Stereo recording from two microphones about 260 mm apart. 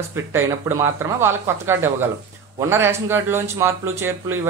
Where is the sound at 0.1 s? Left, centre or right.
Centre.